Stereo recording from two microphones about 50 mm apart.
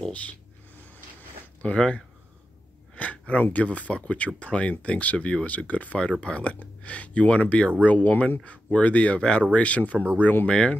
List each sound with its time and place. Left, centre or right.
0.1 s speech: left
1.6 s speech: left
3.0 s a sound: left
3.5 s speech: left
9.9 s speech: right
10.4 s speech: left